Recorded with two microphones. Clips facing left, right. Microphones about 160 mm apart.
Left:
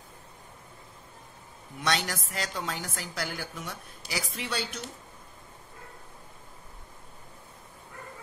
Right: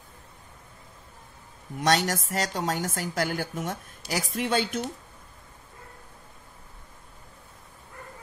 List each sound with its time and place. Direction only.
1.8 s a woman's voice: 45° right (ahead or behind)